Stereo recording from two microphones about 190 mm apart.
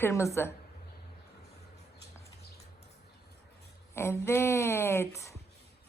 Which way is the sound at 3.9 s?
15° left (ahead or behind).